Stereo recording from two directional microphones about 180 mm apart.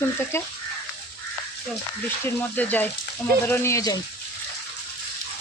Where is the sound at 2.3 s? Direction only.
10° left (ahead or behind).